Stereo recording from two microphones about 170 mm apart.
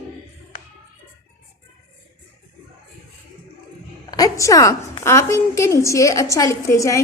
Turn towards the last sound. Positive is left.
turn(degrees=20)  # may be behind; listen again after turning